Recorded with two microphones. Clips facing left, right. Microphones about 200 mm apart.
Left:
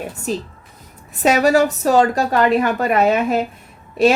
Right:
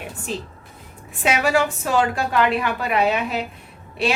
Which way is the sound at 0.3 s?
40° left (ahead or behind).